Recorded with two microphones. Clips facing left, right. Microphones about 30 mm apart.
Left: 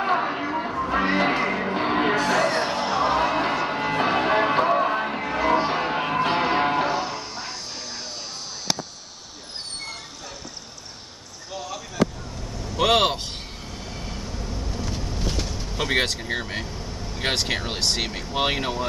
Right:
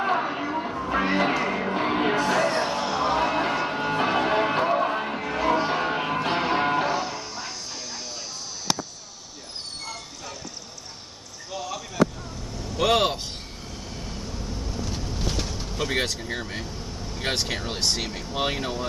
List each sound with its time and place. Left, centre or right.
0.0 s music: centre
2.6 s change ringing: centre
11.5 s basketball bounce: centre
12.7 s a sound: left
13.9 s vehicle: centre
15.2 s vehicle: centre
15.7 s vehicle: left
17.3 s a sound: left